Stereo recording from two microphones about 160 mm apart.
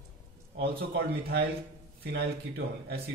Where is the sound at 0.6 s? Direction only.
85° right.